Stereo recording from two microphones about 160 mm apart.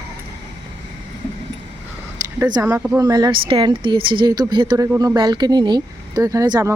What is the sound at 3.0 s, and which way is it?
Speech, 25° right (ahead or behind).